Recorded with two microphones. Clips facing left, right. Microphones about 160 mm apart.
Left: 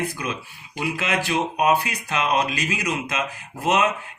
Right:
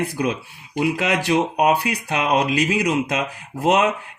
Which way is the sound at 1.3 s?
60° right (ahead or behind).